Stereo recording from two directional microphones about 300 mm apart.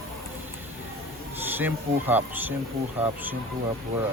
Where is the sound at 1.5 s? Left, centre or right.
Centre.